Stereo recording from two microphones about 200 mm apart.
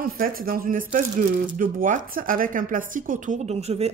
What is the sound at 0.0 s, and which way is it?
Speech, 45° right (ahead or behind).